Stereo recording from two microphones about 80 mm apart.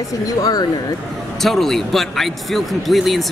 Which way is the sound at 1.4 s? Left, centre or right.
Centre.